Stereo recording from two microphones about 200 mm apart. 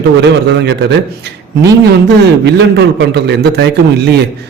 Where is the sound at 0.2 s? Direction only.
60° right (ahead or behind).